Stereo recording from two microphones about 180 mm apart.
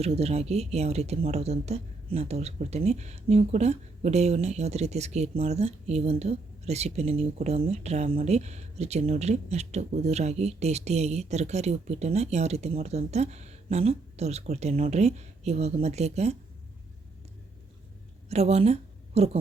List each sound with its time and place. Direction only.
0.0 s speech: 35° right (ahead or behind)
18.3 s a woman's voice: 35° right (ahead or behind)